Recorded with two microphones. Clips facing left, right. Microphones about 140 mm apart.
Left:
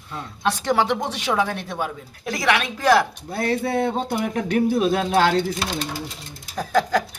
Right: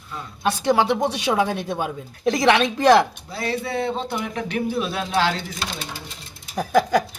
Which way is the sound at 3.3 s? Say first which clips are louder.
Left 7 dB; 55° left (ahead or behind).